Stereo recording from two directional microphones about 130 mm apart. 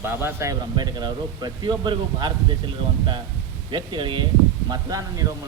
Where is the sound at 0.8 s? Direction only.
35° right (ahead or behind).